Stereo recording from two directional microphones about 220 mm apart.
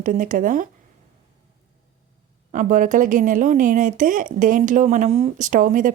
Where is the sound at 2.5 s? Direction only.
35° right (ahead or behind).